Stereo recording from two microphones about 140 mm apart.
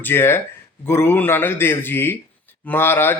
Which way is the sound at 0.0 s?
15° left (ahead or behind).